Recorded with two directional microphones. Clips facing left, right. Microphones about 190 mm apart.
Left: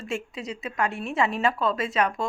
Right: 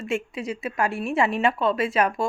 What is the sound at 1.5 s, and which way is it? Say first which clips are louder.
Speech: right 3 dB; 25° right (ahead or behind).